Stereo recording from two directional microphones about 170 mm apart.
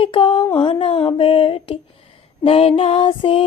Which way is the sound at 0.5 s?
30° left (ahead or behind).